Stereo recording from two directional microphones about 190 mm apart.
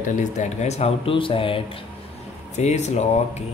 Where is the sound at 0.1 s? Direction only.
40° left (ahead or behind).